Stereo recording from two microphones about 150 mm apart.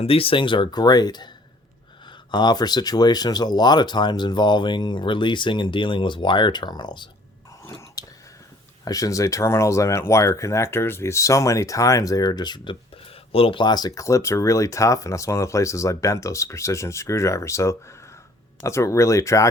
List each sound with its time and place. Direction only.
0.0 s speech: 40° left (ahead or behind)
2.3 s speech: 30° left (ahead or behind)
8.0 s whispering: 25° left (ahead or behind)
8.8 s speech: 25° left (ahead or behind)